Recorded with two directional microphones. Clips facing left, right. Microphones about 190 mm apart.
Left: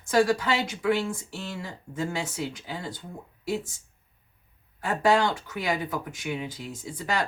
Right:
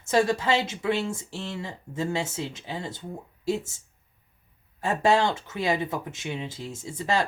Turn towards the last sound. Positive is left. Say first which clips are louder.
# right 3 dB
turn(degrees=-25)  # may be behind; listen again after turning